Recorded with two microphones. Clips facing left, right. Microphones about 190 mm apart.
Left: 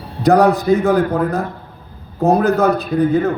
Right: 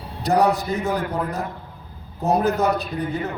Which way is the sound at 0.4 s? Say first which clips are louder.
Left 8 dB; 55° left (ahead or behind).